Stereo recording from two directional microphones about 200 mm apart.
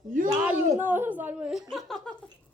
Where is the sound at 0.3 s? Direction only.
5° right (ahead or behind).